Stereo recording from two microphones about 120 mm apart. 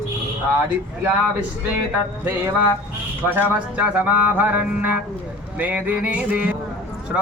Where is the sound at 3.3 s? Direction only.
10° right (ahead or behind).